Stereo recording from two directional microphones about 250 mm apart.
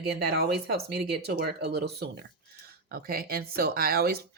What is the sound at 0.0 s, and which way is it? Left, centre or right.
Speech, right.